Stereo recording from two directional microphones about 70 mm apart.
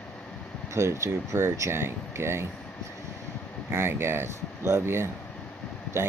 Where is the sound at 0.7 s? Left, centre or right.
Right.